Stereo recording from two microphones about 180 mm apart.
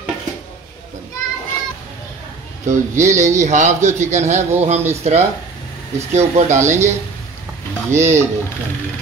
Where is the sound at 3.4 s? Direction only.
40° right (ahead or behind).